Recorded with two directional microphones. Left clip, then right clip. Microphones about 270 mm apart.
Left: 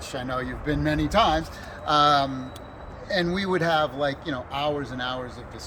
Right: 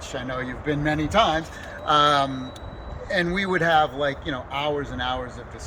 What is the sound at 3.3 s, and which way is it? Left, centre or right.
Speech, centre.